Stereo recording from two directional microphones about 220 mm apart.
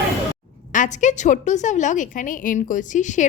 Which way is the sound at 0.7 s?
35° left (ahead or behind).